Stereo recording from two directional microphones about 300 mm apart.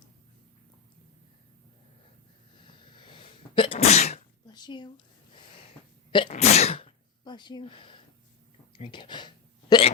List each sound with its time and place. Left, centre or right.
2.6 s sneeze: centre
6.1 s sneeze: centre
8.8 s speech: centre